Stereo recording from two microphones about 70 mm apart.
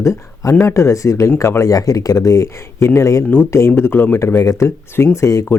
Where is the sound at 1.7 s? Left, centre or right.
Left.